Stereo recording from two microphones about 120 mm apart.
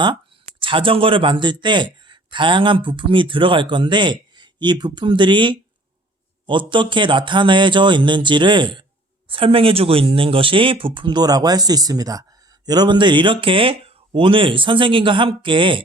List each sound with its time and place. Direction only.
0.6 s a man's voice: 45° right (ahead or behind)